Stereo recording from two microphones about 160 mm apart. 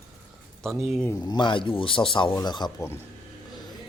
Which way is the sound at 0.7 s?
Centre (ahead or behind).